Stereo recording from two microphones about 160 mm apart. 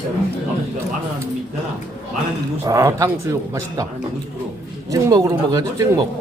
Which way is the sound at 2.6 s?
20° right (ahead or behind).